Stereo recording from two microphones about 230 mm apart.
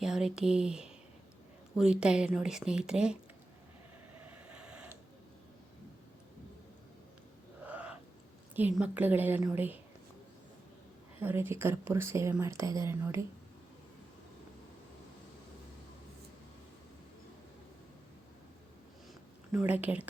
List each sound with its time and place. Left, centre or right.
0.0 s speech: centre
4.3 s train: centre
7.7 s owl: centre
8.5 s speech: centre
11.2 s speech: centre
19.5 s speech: centre